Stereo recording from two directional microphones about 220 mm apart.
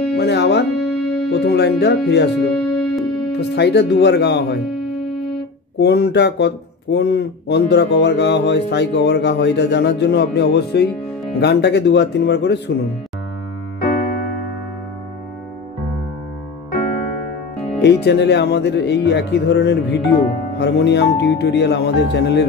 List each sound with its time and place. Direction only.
0.2 s music: 50° left (ahead or behind)
0.8 s music: centre (ahead or behind)
1.3 s speech: 50° left (ahead or behind)
2.5 s music: centre (ahead or behind)
3.3 s speech: 50° left (ahead or behind)
5.8 s speech: 50° left (ahead or behind)
17.8 s speech: 50° left (ahead or behind)